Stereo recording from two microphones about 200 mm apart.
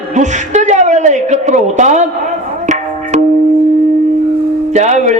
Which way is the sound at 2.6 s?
35° right (ahead or behind).